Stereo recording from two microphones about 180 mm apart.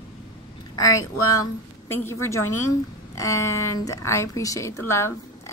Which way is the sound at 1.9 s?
15° left (ahead or behind).